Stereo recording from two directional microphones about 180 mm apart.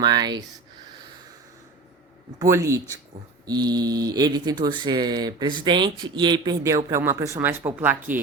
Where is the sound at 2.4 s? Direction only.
15° right (ahead or behind).